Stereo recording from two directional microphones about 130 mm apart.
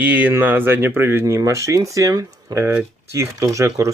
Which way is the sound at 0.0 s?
10° right (ahead or behind).